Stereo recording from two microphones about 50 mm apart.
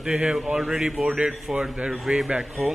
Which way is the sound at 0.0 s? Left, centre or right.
Centre.